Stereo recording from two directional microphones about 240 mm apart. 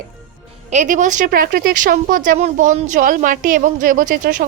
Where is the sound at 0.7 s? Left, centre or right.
Right.